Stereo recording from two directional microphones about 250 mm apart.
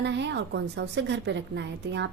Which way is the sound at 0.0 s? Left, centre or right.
Right.